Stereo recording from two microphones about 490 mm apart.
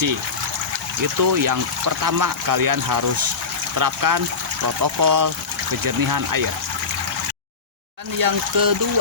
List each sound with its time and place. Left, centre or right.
1.2 s speech: right
8.2 s speech: right